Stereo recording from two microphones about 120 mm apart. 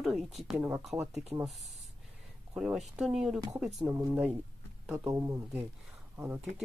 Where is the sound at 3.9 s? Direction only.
20° right (ahead or behind).